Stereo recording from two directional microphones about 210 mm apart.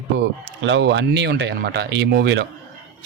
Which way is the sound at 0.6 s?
60° right (ahead or behind).